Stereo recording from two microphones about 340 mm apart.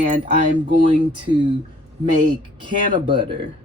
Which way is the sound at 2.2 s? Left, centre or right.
Centre.